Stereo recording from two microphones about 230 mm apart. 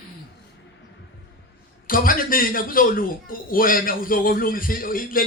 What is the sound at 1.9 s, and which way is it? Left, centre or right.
A man's voice, left.